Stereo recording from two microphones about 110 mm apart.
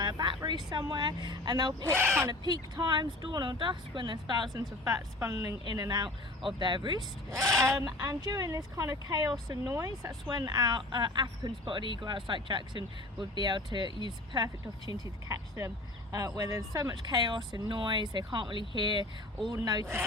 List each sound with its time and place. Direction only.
0.0 s speech: 40° right (ahead or behind)
1.9 s speech: 20° right (ahead or behind)
2.4 s speech: 40° right (ahead or behind)
4.9 s speech: 30° right (ahead or behind)
7.6 s speech: 30° right (ahead or behind)